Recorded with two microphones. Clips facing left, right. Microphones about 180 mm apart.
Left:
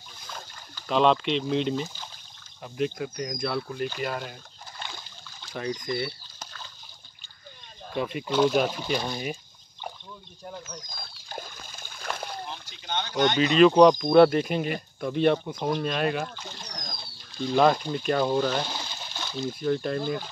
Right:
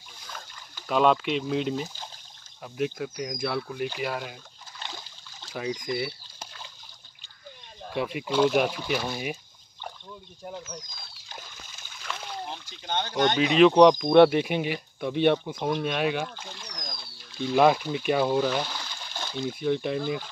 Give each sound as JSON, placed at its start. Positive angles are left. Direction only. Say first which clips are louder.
{"t": 0.8, "sound": "speech", "louder": "even", "side_deg": -5}
{"t": 5.5, "sound": "speech", "louder": "even", "side_deg": -5}
{"t": 6.4, "sound": "splash", "louder": "even", "side_deg": -20}
{"t": 7.9, "sound": "speech", "louder": "even", "side_deg": -5}
{"t": 10.4, "sound": "speech", "louder": "right 2 dB", "side_deg": -10}
{"t": 10.9, "sound": "a sound", "louder": "left 5 dB", "side_deg": 50}
{"t": 12.4, "sound": "boat", "louder": "right 2 dB", "side_deg": -45}
{"t": 13.6, "sound": "speech", "louder": "even", "side_deg": 0}
{"t": 16.5, "sound": "a sound", "louder": "left 1 dB", "side_deg": 40}
{"t": 17.5, "sound": "speech", "louder": "right 1 dB", "side_deg": -5}
{"t": 18.7, "sound": "water", "louder": "left 2 dB", "side_deg": 20}
{"t": 19.4, "sound": "speech", "louder": "even", "side_deg": -10}